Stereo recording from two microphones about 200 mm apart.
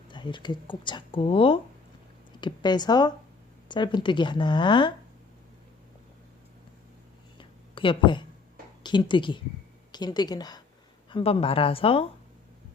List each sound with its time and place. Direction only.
0.1 s speech: 25° left (ahead or behind)
7.3 s a sound: 25° left (ahead or behind)
8.8 s speech: 20° left (ahead or behind)